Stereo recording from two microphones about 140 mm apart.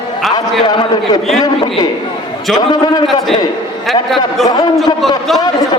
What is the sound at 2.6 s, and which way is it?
Speech, 30° left (ahead or behind).